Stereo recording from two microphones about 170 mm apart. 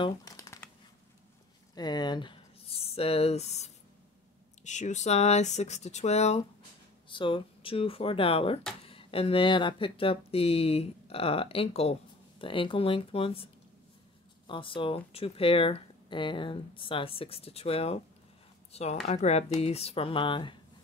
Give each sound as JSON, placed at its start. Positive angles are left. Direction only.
{"t": 0.0, "sound": "shuffling cards", "side_deg": 20}
{"t": 1.8, "sound": "a sound", "side_deg": 25}
{"t": 4.6, "sound": "speech", "side_deg": 45}
{"t": 7.1, "sound": "speech", "side_deg": 30}
{"t": 14.5, "sound": "speech", "side_deg": 30}